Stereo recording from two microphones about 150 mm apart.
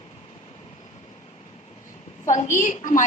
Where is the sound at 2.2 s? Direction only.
60° left (ahead or behind).